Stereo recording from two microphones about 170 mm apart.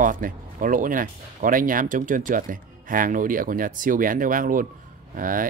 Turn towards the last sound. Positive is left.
turn(degrees=-55)  # may be behind; listen again after turning